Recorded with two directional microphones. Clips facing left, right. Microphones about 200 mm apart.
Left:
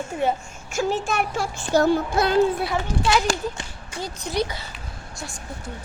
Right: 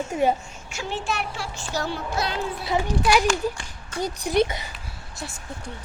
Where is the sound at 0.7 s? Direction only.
45° left (ahead or behind).